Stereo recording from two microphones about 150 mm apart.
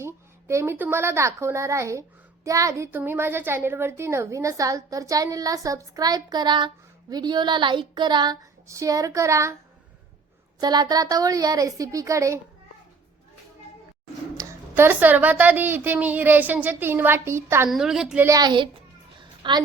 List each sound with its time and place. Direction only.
0.0 s a woman's voice: 20° right (ahead or behind)
10.6 s a woman's voice: 25° right (ahead or behind)
14.3 s a woman's voice: 15° right (ahead or behind)
17.7 s a child's voice: 5° right (ahead or behind)
18.3 s a woman's voice: 25° right (ahead or behind)
19.2 s a sound: 30° right (ahead or behind)